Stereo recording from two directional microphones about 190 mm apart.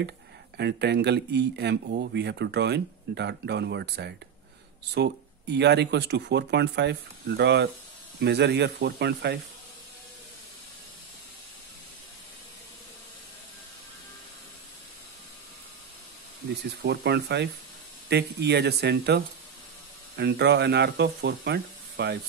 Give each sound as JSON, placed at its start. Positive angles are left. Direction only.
{"t": 0.6, "sound": "speech", "side_deg": -65}
{"t": 16.8, "sound": "speech", "side_deg": -60}